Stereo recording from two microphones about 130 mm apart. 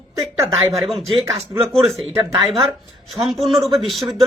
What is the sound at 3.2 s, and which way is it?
Speech, centre (ahead or behind).